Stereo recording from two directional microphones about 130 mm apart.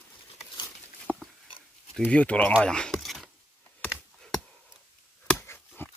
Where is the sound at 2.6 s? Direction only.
5° left (ahead or behind).